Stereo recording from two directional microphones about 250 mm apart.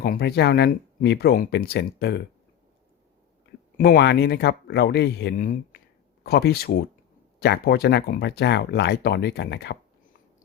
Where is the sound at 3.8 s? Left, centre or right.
Left.